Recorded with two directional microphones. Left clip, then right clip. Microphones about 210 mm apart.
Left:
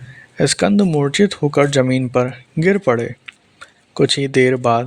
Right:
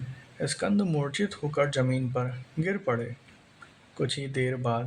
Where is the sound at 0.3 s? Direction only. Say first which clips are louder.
Left 14 dB; 40° left (ahead or behind).